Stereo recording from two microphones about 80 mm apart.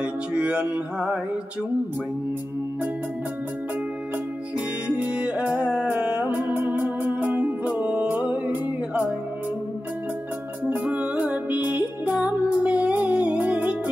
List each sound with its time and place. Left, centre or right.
0.0 s music: centre
4.6 s music: centre
10.6 s music: centre